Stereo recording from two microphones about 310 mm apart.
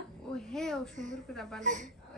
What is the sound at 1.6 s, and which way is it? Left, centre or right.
Speech, right.